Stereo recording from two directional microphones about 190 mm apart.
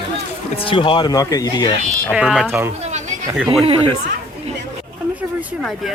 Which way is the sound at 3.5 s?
30° right (ahead or behind).